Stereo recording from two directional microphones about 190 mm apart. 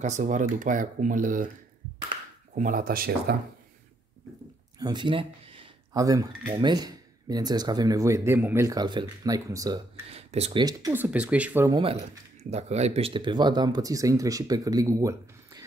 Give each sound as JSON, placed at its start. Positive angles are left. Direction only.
{"t": 0.0, "sound": "speech", "side_deg": -40}
{"t": 2.5, "sound": "speech", "side_deg": -45}
{"t": 4.7, "sound": "a sound", "side_deg": -20}
{"t": 6.6, "sound": "speech", "side_deg": -20}
{"t": 10.0, "sound": "speech", "side_deg": -35}
{"t": 10.6, "sound": "speech", "side_deg": -20}
{"t": 11.7, "sound": "speech", "side_deg": -30}